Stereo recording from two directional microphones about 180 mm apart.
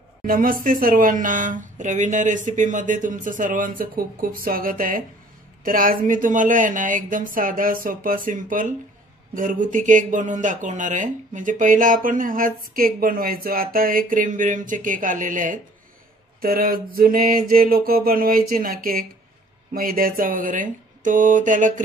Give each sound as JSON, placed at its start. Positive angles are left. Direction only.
{"t": 0.3, "sound": "speech", "side_deg": -50}